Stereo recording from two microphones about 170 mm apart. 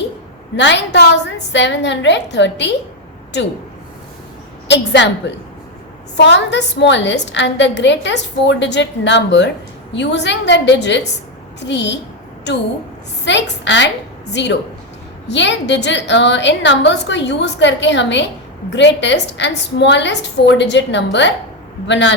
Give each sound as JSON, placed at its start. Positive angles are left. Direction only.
{"t": 0.5, "sound": "a woman's voice", "side_deg": 90}
{"t": 4.7, "sound": "a woman's voice", "side_deg": 90}